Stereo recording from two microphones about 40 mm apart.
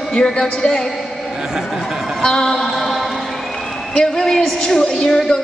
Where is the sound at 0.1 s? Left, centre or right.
Left.